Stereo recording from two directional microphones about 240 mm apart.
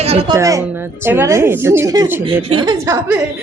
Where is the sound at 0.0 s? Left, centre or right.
Right.